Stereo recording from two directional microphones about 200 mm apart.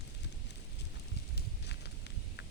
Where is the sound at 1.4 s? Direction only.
60° left (ahead or behind).